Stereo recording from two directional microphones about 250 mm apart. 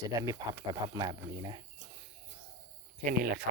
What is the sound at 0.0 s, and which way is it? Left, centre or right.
Speech, centre.